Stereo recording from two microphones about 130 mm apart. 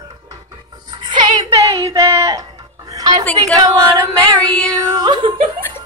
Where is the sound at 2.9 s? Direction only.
30° right (ahead or behind).